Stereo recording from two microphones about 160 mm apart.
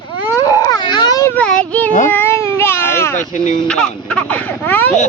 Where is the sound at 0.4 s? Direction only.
25° left (ahead or behind).